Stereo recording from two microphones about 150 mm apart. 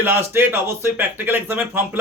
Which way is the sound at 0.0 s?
15° right (ahead or behind).